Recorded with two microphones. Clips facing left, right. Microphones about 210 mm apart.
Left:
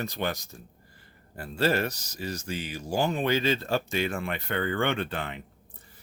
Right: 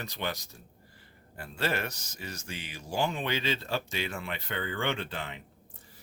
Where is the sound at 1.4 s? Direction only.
40° left (ahead or behind); by 5.4 s 55° left (ahead or behind).